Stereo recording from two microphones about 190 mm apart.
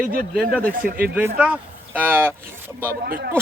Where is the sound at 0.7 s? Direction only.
50° right (ahead or behind).